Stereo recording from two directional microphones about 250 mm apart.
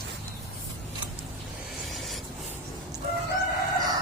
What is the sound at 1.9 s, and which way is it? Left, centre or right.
Writing, centre.